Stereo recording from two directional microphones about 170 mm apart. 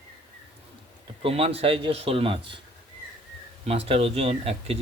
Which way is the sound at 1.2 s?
35° right (ahead or behind).